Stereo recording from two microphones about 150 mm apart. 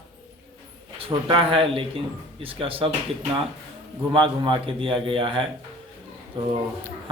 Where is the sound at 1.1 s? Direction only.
35° right (ahead or behind).